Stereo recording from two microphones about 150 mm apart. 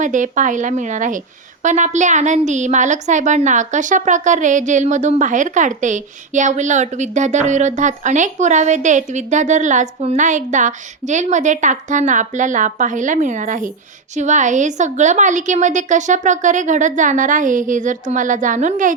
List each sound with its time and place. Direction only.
0.0 s a woman's voice: 55° right (ahead or behind)